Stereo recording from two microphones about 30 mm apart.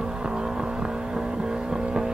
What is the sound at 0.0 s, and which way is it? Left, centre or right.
Vehicle, right.